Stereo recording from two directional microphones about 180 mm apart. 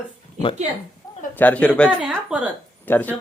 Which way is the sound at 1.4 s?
10° left (ahead or behind).